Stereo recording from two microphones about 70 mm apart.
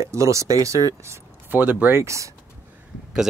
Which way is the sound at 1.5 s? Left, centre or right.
Right.